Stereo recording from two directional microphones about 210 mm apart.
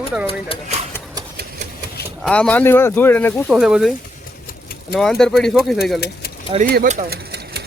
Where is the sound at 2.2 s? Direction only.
5° left (ahead or behind).